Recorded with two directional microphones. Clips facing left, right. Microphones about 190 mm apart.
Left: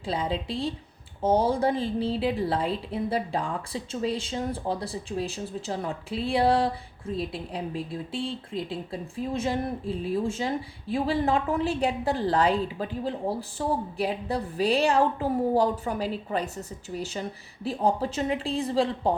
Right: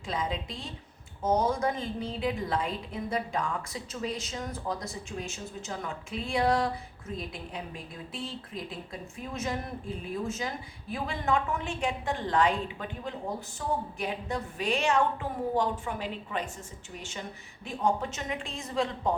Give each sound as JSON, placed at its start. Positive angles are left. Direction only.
{"t": 0.0, "sound": "a woman's voice", "side_deg": 30}